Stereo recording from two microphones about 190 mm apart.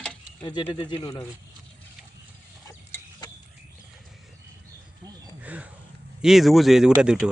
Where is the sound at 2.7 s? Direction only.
15° left (ahead or behind).